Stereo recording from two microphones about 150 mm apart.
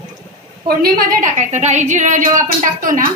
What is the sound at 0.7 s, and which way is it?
A woman's voice, 75° right (ahead or behind).